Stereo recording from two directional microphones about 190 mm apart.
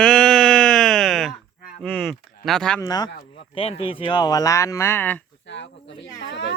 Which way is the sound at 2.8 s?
20° left (ahead or behind).